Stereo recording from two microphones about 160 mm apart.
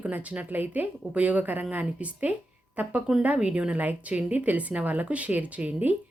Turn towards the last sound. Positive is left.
turn(degrees=-10)  # may be behind; listen again after turning